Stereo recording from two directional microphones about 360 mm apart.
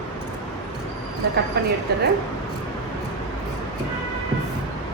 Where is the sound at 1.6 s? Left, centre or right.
Right.